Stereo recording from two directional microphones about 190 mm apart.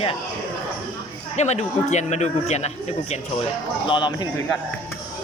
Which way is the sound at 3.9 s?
25° left (ahead or behind).